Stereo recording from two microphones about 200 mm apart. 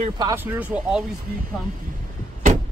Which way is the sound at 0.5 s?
5° right (ahead or behind).